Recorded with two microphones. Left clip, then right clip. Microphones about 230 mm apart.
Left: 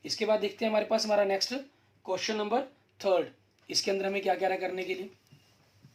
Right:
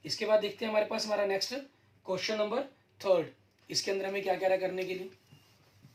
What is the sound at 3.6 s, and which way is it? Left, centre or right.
Speech, left.